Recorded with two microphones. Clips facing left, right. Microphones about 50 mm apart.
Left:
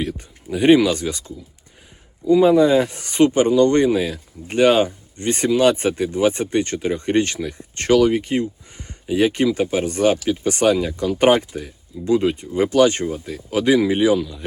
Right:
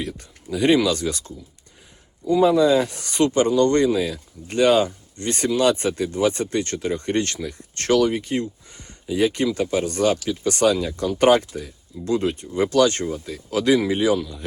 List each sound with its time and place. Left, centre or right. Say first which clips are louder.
0.2 s speech: left 2 dB; left
2.2 s speech: left 3 dB; left